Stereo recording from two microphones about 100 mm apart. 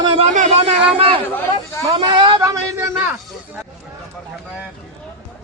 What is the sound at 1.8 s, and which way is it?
Speech, 60° right (ahead or behind).